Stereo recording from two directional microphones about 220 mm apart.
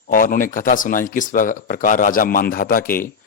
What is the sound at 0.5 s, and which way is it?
Speech, 40° left (ahead or behind).